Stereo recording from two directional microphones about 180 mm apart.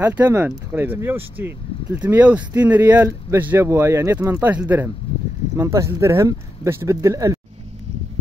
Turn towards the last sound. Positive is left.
turn(degrees=-15)  # may be behind; listen again after turning